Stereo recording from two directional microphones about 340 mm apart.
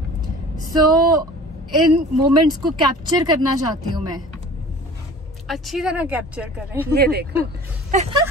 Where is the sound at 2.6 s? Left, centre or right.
Centre.